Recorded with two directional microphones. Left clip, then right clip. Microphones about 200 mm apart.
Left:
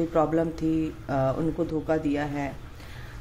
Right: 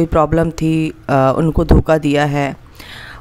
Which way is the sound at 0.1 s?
40° right (ahead or behind).